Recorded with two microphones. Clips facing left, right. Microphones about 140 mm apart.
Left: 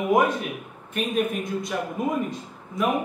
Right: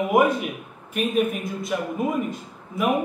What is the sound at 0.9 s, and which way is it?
A man's voice, centre (ahead or behind).